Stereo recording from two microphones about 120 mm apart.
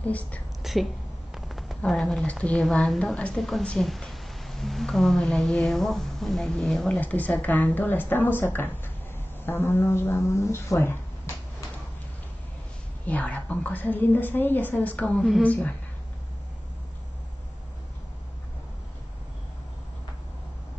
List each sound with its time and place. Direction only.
0.0 s a woman's voice: 10° left (ahead or behind)
0.6 s speech: centre (ahead or behind)
1.3 s a sound: centre (ahead or behind)
1.8 s a woman's voice: centre (ahead or behind)
7.0 s a woman's voice: 15° left (ahead or behind)
13.0 s a woman's voice: 15° left (ahead or behind)